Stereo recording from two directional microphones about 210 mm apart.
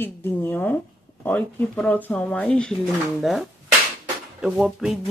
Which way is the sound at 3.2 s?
Centre (ahead or behind).